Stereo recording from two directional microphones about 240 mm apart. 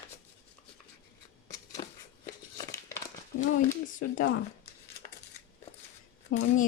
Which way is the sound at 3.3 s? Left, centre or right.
Left.